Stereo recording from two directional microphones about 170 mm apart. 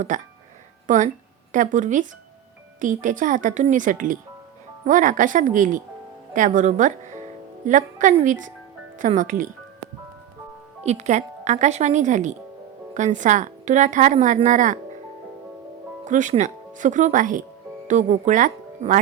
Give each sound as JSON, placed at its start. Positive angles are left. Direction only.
{"t": 0.1, "sound": "a woman's voice", "side_deg": -50}
{"t": 10.8, "sound": "a woman's voice", "side_deg": -40}
{"t": 16.0, "sound": "a woman's voice", "side_deg": -45}